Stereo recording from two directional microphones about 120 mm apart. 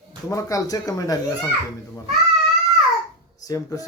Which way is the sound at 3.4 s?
30° left (ahead or behind).